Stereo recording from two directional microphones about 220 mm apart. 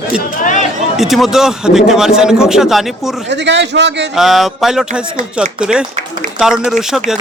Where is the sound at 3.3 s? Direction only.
50° right (ahead or behind).